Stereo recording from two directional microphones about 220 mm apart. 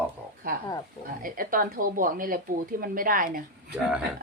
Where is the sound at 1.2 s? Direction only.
40° right (ahead or behind).